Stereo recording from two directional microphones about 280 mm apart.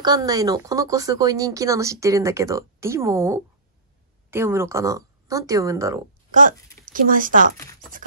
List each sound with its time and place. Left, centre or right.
0.0 s speech: centre
6.9 s speech: right
7.5 s speech: centre